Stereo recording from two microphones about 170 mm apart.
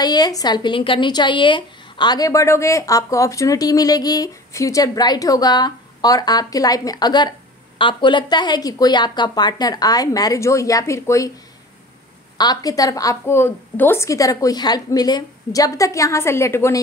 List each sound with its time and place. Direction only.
0.0 s a woman's voice: 25° left (ahead or behind)
12.4 s a woman's voice: 20° left (ahead or behind)